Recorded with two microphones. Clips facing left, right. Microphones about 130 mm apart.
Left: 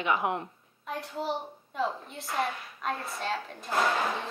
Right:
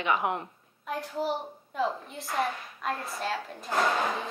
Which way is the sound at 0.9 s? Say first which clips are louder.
Right 2 dB; centre (ahead or behind).